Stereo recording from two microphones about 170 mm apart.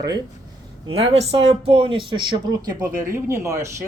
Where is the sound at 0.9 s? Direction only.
35° right (ahead or behind).